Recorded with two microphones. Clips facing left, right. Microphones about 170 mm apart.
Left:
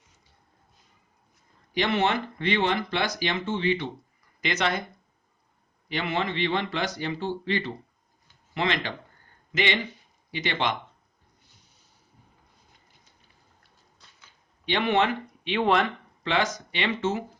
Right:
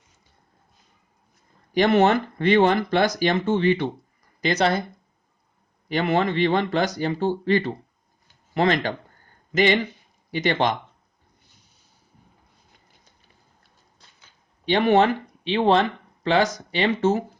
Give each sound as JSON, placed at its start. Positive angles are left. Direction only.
{"t": 1.7, "sound": "speech", "side_deg": -45}
{"t": 4.4, "sound": "speech", "side_deg": -35}
{"t": 5.9, "sound": "speech", "side_deg": -45}
{"t": 14.6, "sound": "speech", "side_deg": -40}